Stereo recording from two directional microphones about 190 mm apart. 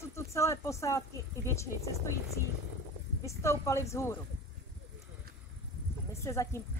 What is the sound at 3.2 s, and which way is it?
Speech, 15° left (ahead or behind).